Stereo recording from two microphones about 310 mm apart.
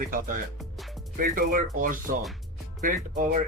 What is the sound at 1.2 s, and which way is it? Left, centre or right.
Speech, right.